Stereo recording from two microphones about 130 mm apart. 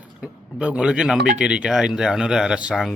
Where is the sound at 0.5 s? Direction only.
10° right (ahead or behind).